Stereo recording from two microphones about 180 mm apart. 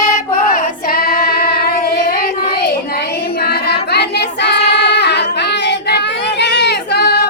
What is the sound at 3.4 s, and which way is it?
Child singing, 65° left (ahead or behind).